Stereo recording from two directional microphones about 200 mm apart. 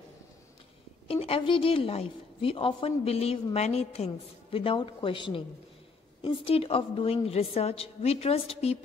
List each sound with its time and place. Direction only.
1.0 s a woman's voice: 30° left (ahead or behind)